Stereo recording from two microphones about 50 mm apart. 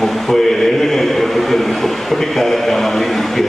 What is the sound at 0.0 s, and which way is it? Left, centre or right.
Chant, centre.